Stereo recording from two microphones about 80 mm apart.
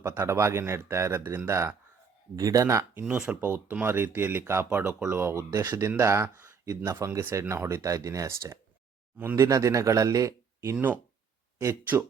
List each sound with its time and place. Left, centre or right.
0.0 s speech: right
2.3 s speech: right
2.9 s speech: right